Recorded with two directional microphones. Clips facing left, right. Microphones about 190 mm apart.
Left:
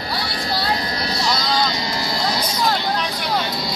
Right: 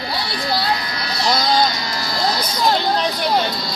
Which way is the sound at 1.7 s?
25° left (ahead or behind).